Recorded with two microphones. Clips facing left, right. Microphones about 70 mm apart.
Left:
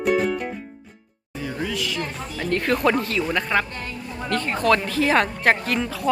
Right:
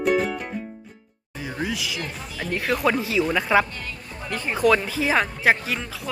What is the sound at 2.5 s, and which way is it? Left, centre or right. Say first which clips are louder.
A woman's voice: left 2 dB; centre.